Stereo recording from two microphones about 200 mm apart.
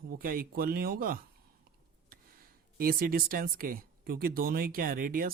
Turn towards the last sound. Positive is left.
turn(degrees=-45)  # may be behind; listen again after turning